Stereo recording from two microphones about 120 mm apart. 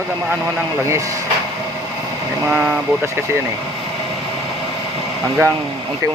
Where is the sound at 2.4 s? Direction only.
10° right (ahead or behind).